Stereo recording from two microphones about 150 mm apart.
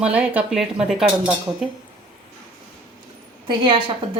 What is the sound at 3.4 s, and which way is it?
Speech, 35° right (ahead or behind).